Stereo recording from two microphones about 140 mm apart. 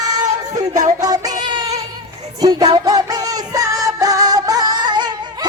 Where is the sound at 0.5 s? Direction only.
25° right (ahead or behind).